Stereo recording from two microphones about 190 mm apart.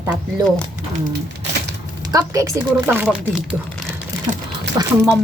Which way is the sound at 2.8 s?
5° right (ahead or behind).